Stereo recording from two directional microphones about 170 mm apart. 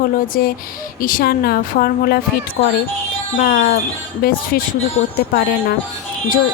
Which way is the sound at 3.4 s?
55° left (ahead or behind).